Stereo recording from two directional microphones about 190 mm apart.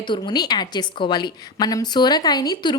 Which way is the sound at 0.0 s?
25° left (ahead or behind).